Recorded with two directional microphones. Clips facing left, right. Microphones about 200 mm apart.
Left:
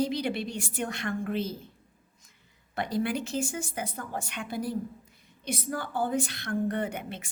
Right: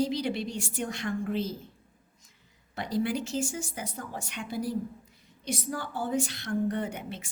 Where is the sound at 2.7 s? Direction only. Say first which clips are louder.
Even; 55° left (ahead or behind).